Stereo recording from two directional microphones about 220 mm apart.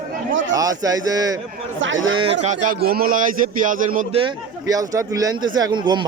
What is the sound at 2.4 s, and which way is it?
A man's voice, 35° right (ahead or behind).